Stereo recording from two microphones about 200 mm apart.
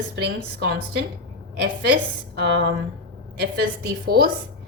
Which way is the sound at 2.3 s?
55° right (ahead or behind).